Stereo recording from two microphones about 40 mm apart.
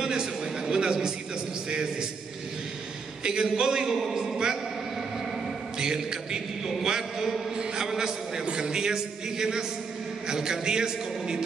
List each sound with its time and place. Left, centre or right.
0.0 s a sound: centre
1.7 s a man's voice: centre
3.3 s a man's voice: centre
5.8 s a man's voice: centre